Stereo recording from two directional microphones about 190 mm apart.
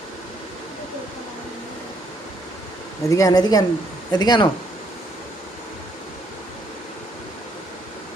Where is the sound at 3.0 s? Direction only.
20° left (ahead or behind).